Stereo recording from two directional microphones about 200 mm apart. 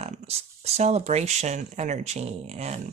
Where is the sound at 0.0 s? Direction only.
30° right (ahead or behind).